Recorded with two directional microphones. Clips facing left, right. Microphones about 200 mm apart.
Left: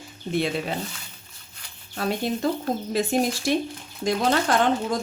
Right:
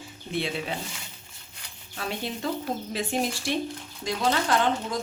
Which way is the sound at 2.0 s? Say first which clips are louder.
Left 7 dB; 40° left (ahead or behind).